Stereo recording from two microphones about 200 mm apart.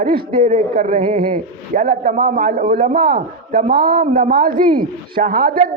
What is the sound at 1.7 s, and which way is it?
Speech, 40° right (ahead or behind).